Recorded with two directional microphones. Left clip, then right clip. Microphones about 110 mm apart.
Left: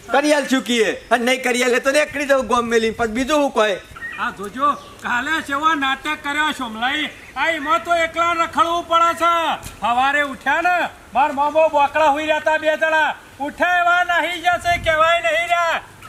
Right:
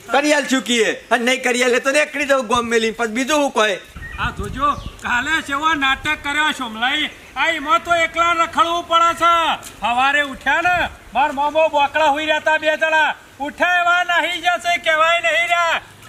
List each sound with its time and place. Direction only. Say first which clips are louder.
0.1 s speech: even; centre (ahead or behind)